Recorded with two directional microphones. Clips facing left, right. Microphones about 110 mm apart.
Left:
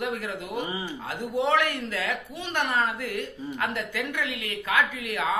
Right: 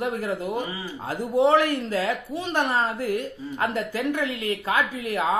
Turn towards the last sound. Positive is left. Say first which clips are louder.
# right 4 dB
turn(degrees=-35)  # may be behind; listen again after turning